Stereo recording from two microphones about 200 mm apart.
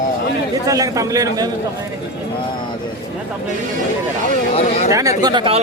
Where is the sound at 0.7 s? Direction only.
15° right (ahead or behind).